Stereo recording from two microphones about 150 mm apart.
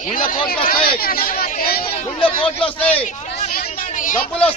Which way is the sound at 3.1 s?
50° left (ahead or behind).